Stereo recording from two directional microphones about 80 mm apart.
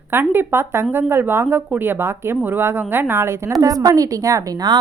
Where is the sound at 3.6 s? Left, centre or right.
Right.